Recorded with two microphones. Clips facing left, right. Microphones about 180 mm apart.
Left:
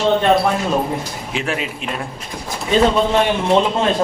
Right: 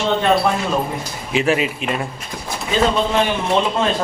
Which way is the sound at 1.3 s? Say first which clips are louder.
Right 6 dB; 5° right (ahead or behind).